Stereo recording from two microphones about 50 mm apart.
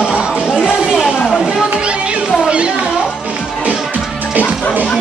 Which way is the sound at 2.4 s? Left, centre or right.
Right.